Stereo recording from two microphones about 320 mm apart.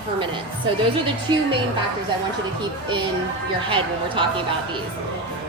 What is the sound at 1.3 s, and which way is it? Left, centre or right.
Speech, centre.